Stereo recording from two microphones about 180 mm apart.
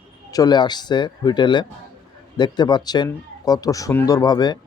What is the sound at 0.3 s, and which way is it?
A man's voice, 20° left (ahead or behind).